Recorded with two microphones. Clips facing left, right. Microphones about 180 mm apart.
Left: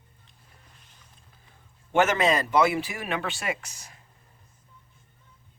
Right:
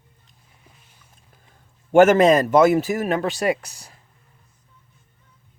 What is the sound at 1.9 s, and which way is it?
Speech, 45° right (ahead or behind).